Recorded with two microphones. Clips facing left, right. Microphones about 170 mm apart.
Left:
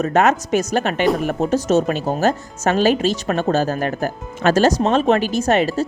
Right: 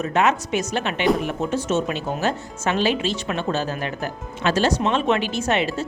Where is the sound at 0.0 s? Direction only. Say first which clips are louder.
Left 4 dB; 45° left (ahead or behind).